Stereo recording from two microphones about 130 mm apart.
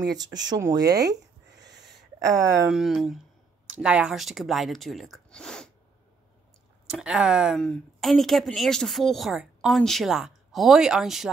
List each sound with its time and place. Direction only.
0.1 s speech: 30° right (ahead or behind)
0.7 s a sound: 30° right (ahead or behind)
2.7 s a woman's voice: 5° right (ahead or behind)
6.9 s a woman's voice: 5° right (ahead or behind)